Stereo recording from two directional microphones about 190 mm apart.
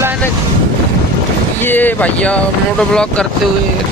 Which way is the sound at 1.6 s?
10° left (ahead or behind).